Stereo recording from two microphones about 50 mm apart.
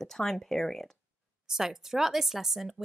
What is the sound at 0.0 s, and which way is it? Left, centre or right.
Speech, centre.